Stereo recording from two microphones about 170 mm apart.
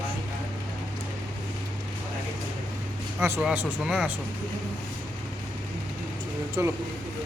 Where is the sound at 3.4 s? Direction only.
5° right (ahead or behind).